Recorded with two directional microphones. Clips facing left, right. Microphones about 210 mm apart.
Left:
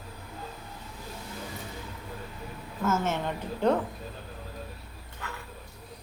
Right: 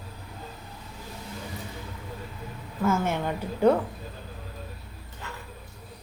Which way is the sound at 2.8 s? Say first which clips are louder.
Right 2 dB; 10° right (ahead or behind).